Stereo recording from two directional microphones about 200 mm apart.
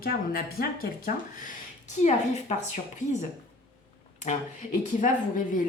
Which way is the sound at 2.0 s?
35° left (ahead or behind).